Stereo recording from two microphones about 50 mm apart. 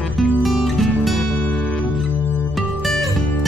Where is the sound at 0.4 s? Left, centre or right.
Centre.